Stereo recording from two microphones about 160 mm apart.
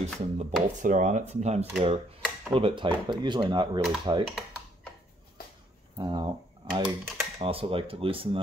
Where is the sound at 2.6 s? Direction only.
35° right (ahead or behind).